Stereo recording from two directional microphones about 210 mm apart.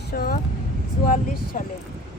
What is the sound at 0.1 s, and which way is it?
Speech, 45° left (ahead or behind).